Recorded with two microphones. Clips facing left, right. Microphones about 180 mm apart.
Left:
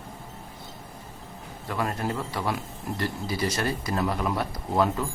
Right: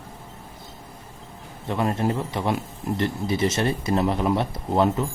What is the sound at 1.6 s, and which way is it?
Speech, 25° right (ahead or behind).